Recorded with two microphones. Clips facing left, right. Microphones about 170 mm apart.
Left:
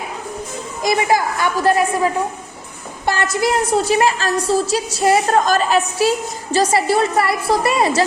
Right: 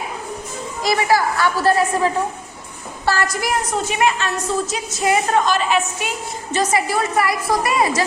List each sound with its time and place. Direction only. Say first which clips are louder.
0.8 s a woman's voice: left 1 dB; 20° left (ahead or behind)
3.1 s a woman's voice: left 2 dB; 25° left (ahead or behind)